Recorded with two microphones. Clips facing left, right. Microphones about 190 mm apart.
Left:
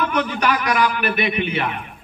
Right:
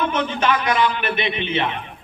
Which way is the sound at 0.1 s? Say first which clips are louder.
Even; 25° right (ahead or behind).